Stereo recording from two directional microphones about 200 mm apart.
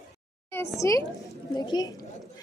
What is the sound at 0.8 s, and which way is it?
A woman's voice, 15° left (ahead or behind).